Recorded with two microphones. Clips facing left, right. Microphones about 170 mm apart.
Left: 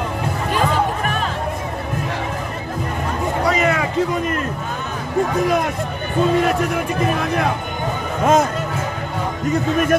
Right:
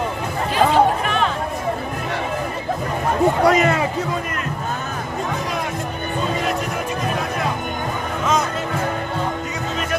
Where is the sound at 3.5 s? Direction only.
45° right (ahead or behind).